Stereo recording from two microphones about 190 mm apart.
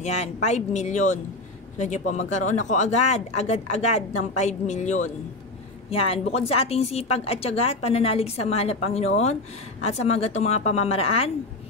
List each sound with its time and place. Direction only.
0.0 s a woman's voice: 35° left (ahead or behind)